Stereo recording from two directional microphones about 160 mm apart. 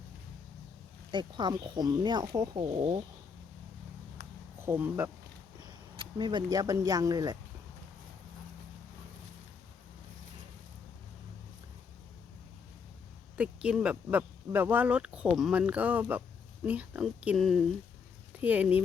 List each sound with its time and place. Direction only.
1.1 s speech: 25° right (ahead or behind)
4.6 s speech: 15° right (ahead or behind)
6.0 s speech: 30° right (ahead or behind)
13.3 s speech: 5° right (ahead or behind)